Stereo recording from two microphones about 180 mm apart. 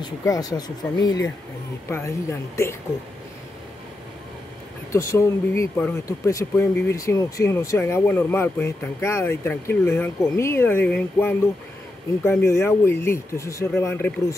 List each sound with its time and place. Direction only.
0.0 s speech: 20° left (ahead or behind)
4.9 s speech: 15° left (ahead or behind)